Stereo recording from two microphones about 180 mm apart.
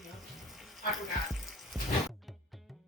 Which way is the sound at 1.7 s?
Centre (ahead or behind).